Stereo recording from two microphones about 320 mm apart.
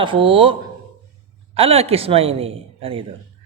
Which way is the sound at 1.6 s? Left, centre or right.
Centre.